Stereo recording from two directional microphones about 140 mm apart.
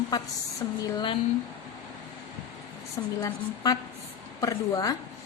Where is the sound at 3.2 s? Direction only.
25° left (ahead or behind).